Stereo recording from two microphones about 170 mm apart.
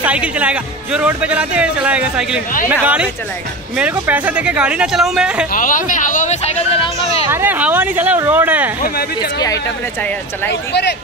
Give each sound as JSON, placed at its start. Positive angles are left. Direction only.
{"t": 0.0, "sound": "speech", "side_deg": -5}
{"t": 5.5, "sound": "speech", "side_deg": 55}
{"t": 7.2, "sound": "speech", "side_deg": -10}
{"t": 8.8, "sound": "speech", "side_deg": 65}
{"t": 10.5, "sound": "speech", "side_deg": 85}